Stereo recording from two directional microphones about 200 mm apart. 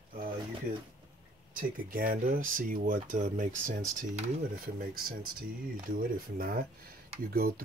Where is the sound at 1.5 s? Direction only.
45° right (ahead or behind).